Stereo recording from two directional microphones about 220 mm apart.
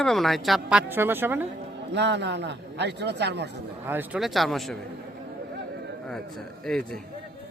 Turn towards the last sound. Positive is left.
turn(degrees=0)  # may be behind; listen again after turning